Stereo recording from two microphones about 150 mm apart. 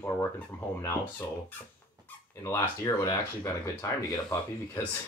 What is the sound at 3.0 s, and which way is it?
Speech, 20° left (ahead or behind).